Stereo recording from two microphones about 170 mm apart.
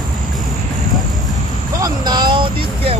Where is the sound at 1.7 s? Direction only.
20° right (ahead or behind).